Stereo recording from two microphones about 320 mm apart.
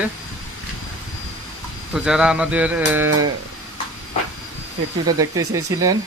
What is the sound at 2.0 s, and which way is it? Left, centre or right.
Speech, centre.